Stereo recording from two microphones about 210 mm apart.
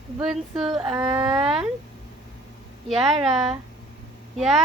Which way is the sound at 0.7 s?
20° right (ahead or behind).